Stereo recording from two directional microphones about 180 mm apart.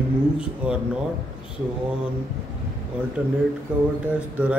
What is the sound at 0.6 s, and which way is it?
Speech, 10° right (ahead or behind).